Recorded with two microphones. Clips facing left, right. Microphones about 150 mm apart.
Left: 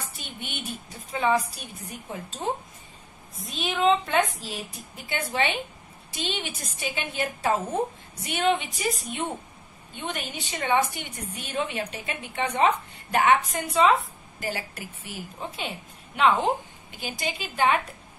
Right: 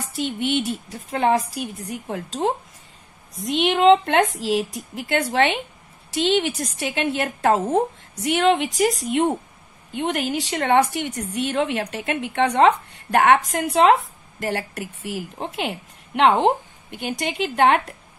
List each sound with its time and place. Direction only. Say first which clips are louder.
0.1 s a woman's voice: right 16 dB; 75° right (ahead or behind)